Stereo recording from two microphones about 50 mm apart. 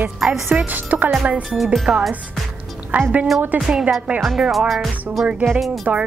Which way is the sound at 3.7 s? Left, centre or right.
Centre.